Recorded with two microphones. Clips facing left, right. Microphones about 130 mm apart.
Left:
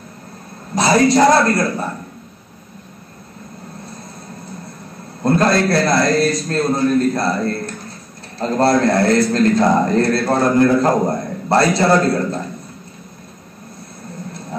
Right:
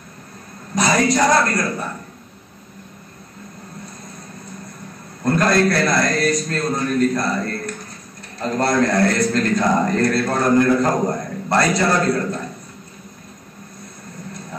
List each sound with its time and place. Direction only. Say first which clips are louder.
0.7 s a woman's voice: left 4 dB; 30° left (ahead or behind)
5.2 s a man's voice: left 2 dB; 30° left (ahead or behind)